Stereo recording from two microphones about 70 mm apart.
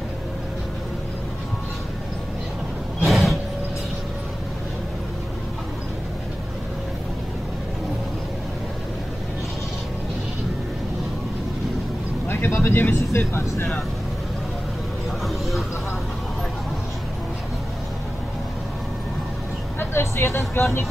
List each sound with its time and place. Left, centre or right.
3.1 s vehicle: centre
12.3 s vehicle: left
13.3 s speech: left
19.8 s vehicle: left